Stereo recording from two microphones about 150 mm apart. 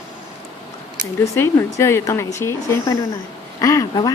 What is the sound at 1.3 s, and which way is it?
Speech, 15° left (ahead or behind).